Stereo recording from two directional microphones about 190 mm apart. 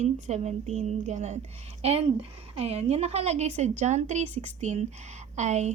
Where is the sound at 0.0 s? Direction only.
35° right (ahead or behind).